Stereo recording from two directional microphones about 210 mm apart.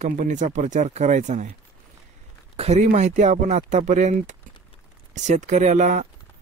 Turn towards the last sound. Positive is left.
turn(degrees=-35)  # may be behind; listen again after turning